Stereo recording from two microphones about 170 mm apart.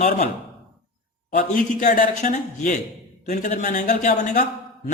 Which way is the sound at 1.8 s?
60° left (ahead or behind).